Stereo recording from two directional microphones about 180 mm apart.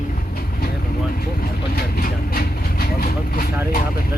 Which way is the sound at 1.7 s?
55° left (ahead or behind).